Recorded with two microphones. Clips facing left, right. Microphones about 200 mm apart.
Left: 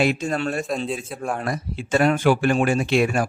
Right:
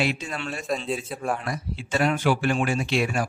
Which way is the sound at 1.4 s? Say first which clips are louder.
Left 4 dB; 50° left (ahead or behind).